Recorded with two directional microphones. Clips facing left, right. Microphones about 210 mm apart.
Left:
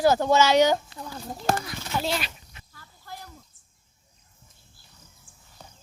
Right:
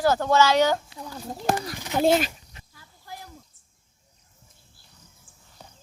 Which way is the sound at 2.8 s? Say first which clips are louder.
Even; 15° right (ahead or behind).